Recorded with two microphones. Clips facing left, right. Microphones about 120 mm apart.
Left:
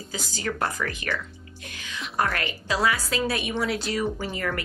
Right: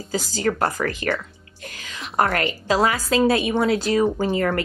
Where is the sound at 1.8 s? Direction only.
40° right (ahead or behind).